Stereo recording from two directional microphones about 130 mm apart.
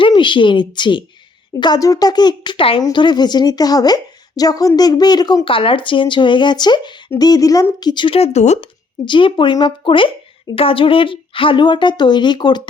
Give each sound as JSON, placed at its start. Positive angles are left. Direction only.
{"t": 0.0, "sound": "speech", "side_deg": 40}
{"t": 9.0, "sound": "speech", "side_deg": 40}